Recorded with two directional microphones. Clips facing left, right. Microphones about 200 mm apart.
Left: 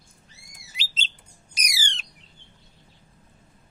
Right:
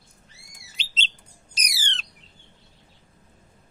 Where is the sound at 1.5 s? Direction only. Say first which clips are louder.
Left 1 dB; 10° left (ahead or behind).